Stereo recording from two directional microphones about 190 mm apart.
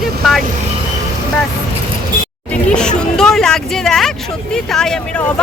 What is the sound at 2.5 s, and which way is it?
Speech, 5° left (ahead or behind).